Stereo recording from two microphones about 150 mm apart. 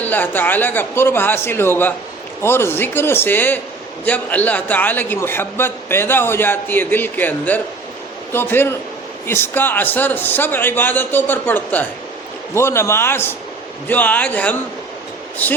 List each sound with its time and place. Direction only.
0.0 s a man's voice: 10° left (ahead or behind)